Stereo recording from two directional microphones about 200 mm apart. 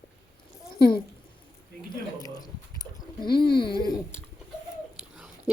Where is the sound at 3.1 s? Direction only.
25° left (ahead or behind).